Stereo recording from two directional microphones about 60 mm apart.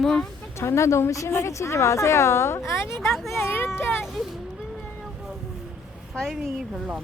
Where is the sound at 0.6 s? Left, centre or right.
Left.